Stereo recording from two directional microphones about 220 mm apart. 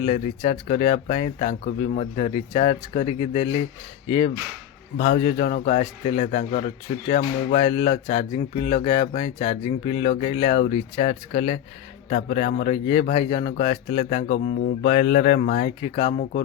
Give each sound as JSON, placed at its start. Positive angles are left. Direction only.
{"t": 0.0, "sound": "speech", "side_deg": 30}
{"t": 4.9, "sound": "a man's voice", "side_deg": 40}